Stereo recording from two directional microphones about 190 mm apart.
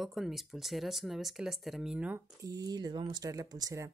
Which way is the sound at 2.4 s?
20° right (ahead or behind).